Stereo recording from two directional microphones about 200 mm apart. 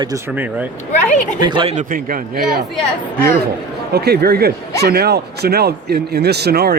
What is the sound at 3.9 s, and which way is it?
Speech, 50° right (ahead or behind).